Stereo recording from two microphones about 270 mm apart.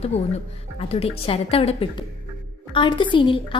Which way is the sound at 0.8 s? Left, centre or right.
Left.